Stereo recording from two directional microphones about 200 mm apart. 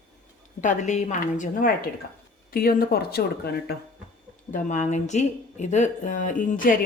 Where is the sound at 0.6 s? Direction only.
40° left (ahead or behind).